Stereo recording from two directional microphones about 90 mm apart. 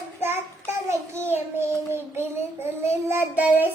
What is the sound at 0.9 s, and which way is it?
Child singing, 30° right (ahead or behind).